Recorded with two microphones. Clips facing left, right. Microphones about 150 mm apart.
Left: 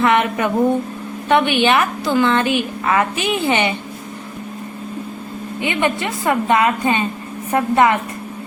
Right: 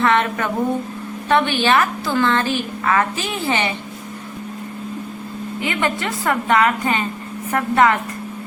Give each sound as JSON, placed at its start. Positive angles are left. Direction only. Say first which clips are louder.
{"t": 0.0, "sound": "a woman's voice", "louder": "left 2 dB", "side_deg": 15}
{"t": 5.5, "sound": "a woman's voice", "louder": "left 3 dB", "side_deg": 20}